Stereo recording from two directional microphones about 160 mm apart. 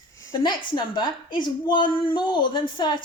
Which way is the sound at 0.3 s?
30° left (ahead or behind).